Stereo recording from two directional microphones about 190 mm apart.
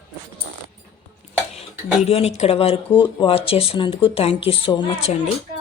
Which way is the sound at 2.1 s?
30° left (ahead or behind).